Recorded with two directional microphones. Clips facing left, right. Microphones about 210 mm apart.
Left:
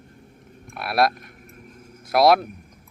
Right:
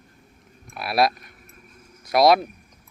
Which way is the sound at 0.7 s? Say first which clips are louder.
Even; centre (ahead or behind).